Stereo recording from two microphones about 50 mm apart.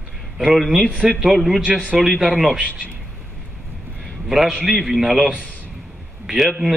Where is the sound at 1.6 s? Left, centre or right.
Centre.